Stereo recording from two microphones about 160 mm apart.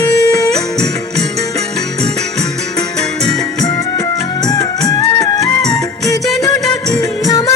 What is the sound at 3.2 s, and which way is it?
Music, 25° left (ahead or behind).